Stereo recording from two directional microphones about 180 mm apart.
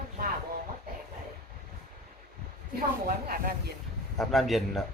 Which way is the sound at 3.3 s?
55° right (ahead or behind).